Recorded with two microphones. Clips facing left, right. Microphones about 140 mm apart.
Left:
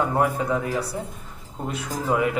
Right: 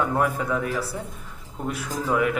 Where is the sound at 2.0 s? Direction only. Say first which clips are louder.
Even; 25° left (ahead or behind).